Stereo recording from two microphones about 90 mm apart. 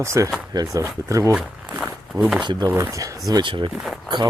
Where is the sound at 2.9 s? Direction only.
40° right (ahead or behind).